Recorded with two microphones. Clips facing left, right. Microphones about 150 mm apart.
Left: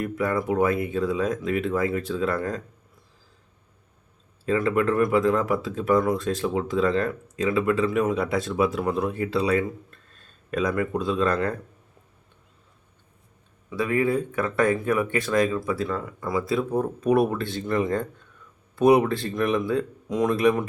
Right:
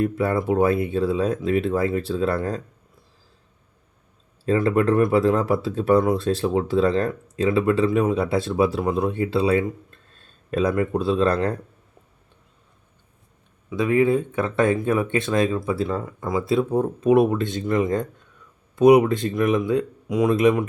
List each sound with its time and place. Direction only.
0.0 s speech: 25° right (ahead or behind)
4.4 s speech: 35° right (ahead or behind)
13.7 s speech: 20° right (ahead or behind)